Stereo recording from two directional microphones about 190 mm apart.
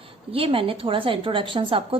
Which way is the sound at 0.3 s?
30° right (ahead or behind).